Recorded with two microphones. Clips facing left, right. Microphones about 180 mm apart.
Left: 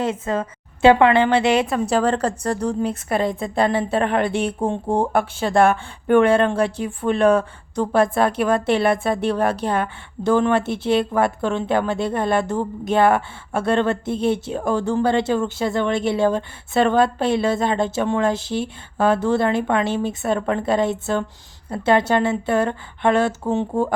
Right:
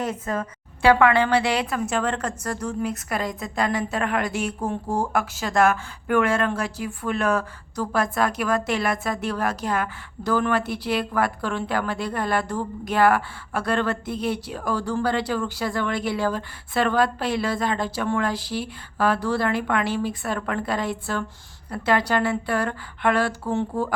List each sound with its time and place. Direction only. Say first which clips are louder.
0.0 s a woman's voice: left 4 dB; 25° left (ahead or behind)